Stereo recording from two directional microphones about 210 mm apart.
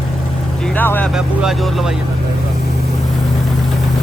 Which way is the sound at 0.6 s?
5° left (ahead or behind).